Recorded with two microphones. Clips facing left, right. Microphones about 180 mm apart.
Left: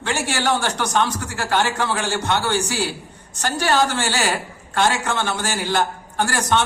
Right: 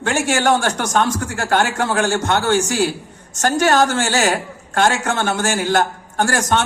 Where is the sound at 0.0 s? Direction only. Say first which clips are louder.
Right 5 dB; 50° right (ahead or behind).